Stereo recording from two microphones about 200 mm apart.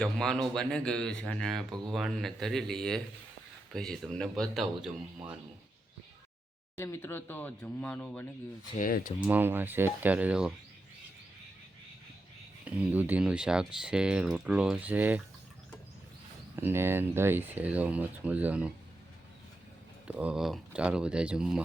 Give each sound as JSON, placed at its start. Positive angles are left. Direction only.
{"t": 0.0, "sound": "speech", "side_deg": 5}
{"t": 6.8, "sound": "speech", "side_deg": 10}
{"t": 8.8, "sound": "speech", "side_deg": 40}
{"t": 9.2, "sound": "speech", "side_deg": -10}
{"t": 12.6, "sound": "speech", "side_deg": -5}
{"t": 16.6, "sound": "speech", "side_deg": -10}
{"t": 20.1, "sound": "speech", "side_deg": -5}